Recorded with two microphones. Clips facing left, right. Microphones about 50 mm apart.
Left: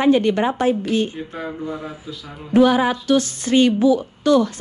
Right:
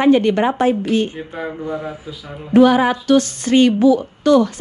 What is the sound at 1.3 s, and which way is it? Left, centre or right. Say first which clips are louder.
Speech: right 3 dB; centre.